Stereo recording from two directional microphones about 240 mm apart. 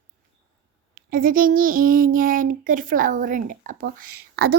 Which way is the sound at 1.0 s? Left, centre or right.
Right.